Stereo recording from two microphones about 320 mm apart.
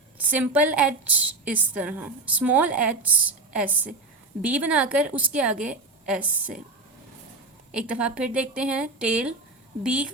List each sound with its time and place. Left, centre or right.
0.2 s a woman's voice: centre
7.7 s a woman's voice: centre